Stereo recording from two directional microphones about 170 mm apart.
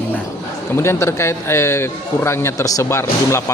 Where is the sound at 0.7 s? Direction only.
15° left (ahead or behind).